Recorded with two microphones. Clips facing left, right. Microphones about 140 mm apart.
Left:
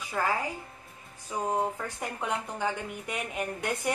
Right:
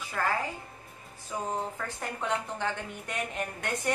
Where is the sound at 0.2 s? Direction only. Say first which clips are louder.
Left 1 dB; 15° left (ahead or behind).